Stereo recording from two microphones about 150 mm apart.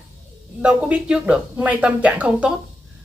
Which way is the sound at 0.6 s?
5° right (ahead or behind).